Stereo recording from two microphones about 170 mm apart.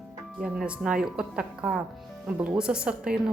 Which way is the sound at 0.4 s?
5° right (ahead or behind).